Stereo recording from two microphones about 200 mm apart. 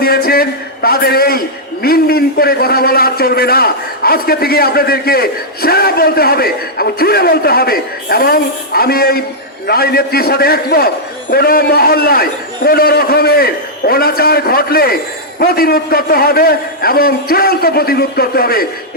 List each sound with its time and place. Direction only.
0.0 s a man's voice: 50° left (ahead or behind)